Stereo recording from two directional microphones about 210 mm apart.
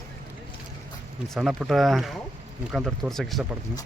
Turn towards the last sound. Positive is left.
turn(degrees=0)  # may be behind; listen again after turning